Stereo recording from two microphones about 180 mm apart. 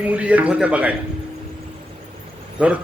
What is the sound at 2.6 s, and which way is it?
Speech, 5° right (ahead or behind).